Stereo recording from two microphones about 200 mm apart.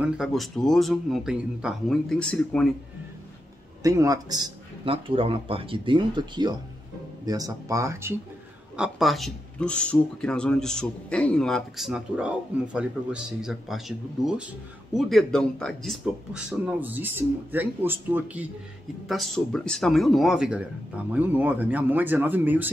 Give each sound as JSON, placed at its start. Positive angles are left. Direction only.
{"t": 0.0, "sound": "speech", "side_deg": 0}
{"t": 3.8, "sound": "speech", "side_deg": -15}
{"t": 8.7, "sound": "speech", "side_deg": 0}